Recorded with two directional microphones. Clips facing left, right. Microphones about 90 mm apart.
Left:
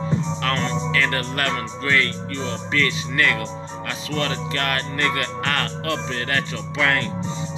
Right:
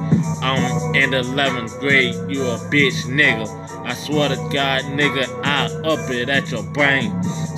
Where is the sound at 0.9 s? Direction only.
20° right (ahead or behind).